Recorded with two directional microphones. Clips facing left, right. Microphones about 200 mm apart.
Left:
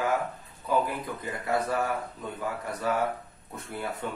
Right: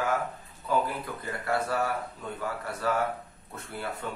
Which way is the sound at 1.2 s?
15° left (ahead or behind).